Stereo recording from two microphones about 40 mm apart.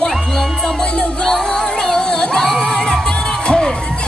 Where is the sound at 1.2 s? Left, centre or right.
Centre.